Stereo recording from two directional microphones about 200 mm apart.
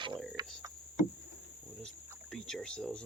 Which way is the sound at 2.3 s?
Centre (ahead or behind).